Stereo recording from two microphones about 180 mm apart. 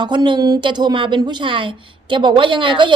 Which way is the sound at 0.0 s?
25° right (ahead or behind).